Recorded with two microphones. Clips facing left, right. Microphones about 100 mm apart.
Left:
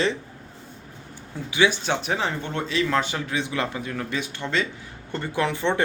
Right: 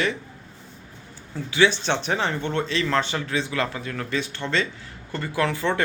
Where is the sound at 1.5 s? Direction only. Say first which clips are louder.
Right 1 dB; 10° left (ahead or behind).